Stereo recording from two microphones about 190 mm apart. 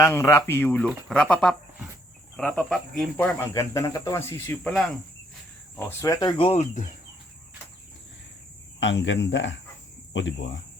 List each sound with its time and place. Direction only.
0.0 s speech: 15° left (ahead or behind)
3.3 s speech: 15° left (ahead or behind)
5.7 s speech: 15° left (ahead or behind); by 6.9 s 40° left (ahead or behind)
8.8 s speech: 70° left (ahead or behind)